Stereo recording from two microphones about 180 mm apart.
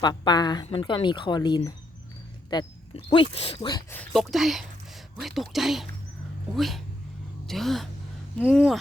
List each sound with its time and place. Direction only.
0.0 s speech: 25° left (ahead or behind)
2.5 s a sound: 25° left (ahead or behind)
3.1 s speech: 30° left (ahead or behind)
3.9 s speech: 5° left (ahead or behind)